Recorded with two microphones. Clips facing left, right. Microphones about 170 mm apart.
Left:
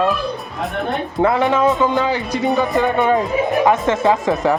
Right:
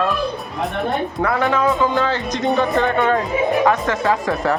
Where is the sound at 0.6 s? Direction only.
Centre (ahead or behind).